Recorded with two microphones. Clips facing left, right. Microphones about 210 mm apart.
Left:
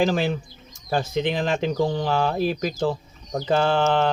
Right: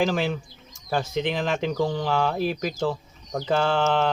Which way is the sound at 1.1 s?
Centre (ahead or behind).